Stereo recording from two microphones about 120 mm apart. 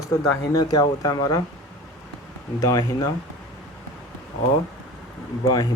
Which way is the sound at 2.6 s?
30° left (ahead or behind).